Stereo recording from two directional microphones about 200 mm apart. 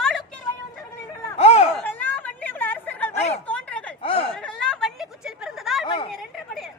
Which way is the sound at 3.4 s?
5° left (ahead or behind).